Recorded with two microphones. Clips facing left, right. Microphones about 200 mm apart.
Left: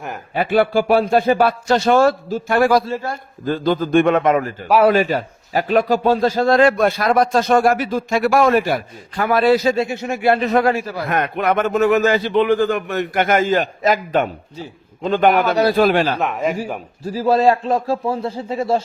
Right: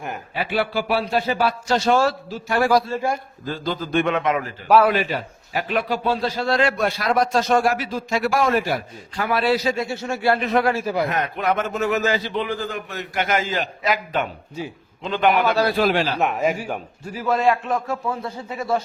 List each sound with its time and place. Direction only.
0.3 s a man's voice: 50° left (ahead or behind)
9.7 s speech: 20° left (ahead or behind)
10.4 s a man's voice: 40° left (ahead or behind)
10.8 s a man's voice: 15° right (ahead or behind)
11.1 s a man's voice: 60° left (ahead or behind)
16.2 s a man's voice: centre (ahead or behind)
17.0 s a man's voice: 30° left (ahead or behind)